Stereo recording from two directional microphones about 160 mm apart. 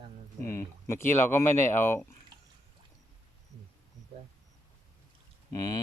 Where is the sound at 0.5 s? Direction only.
15° left (ahead or behind).